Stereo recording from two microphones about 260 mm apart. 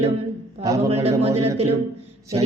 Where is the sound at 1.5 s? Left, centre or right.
Right.